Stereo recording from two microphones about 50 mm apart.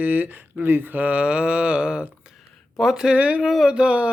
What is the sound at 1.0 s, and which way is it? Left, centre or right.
Mantra, right.